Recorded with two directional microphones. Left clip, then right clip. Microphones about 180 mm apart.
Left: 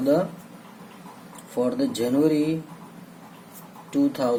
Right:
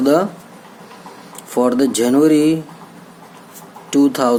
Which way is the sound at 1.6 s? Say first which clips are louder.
Right 9 dB; 40° right (ahead or behind).